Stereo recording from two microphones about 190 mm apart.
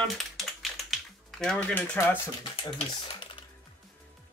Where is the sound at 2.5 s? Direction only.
25° left (ahead or behind).